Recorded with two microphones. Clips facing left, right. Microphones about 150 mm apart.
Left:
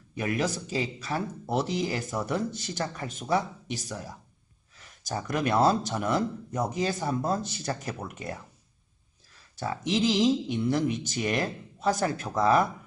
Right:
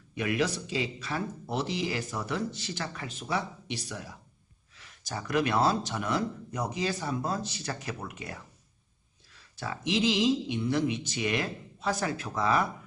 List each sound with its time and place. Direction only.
0.1 s a man's voice: 40° left (ahead or behind)
9.6 s a man's voice: 40° left (ahead or behind)